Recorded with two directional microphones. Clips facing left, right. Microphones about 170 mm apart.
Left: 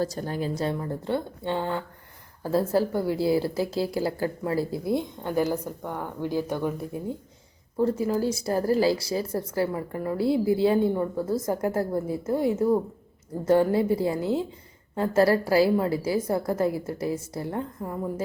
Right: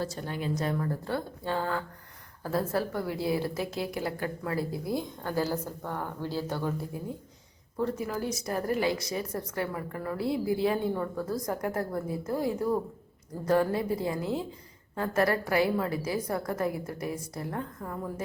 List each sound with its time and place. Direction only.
0.0 s speech: 40° left (ahead or behind); by 7.0 s 15° left (ahead or behind)
7.8 s speech: 30° left (ahead or behind)